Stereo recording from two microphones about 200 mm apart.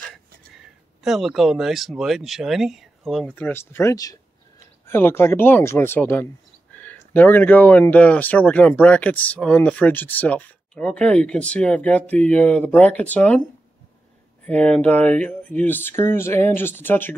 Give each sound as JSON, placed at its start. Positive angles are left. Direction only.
{"t": 1.0, "sound": "speech", "side_deg": 0}
{"t": 14.4, "sound": "speech", "side_deg": 5}